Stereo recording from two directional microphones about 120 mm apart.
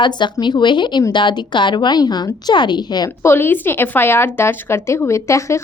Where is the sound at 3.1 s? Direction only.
20° left (ahead or behind).